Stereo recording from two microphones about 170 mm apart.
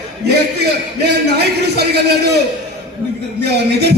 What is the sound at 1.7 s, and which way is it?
Speech, 75° right (ahead or behind).